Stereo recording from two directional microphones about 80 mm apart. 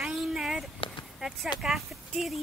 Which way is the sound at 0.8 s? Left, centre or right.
Left.